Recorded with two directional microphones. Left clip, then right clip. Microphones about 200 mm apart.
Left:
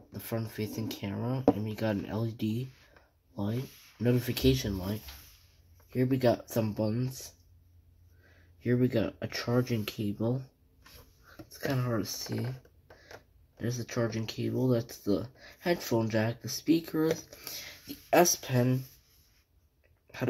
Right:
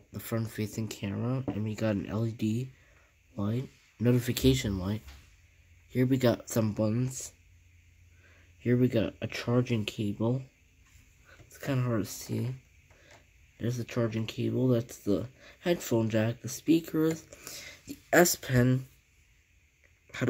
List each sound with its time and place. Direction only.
0.1 s speech: 25° right (ahead or behind)
8.6 s speech: 15° right (ahead or behind)
11.5 s speech: 15° right (ahead or behind)
13.6 s speech: 15° right (ahead or behind); by 18.8 s 35° right (ahead or behind)